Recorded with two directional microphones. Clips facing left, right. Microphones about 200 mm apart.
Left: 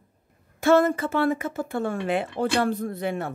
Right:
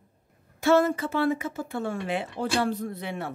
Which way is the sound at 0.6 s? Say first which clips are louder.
Left 2 dB; 50° left (ahead or behind).